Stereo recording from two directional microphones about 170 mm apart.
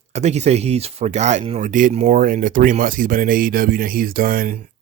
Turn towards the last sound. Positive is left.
turn(degrees=-55)  # may be behind; listen again after turning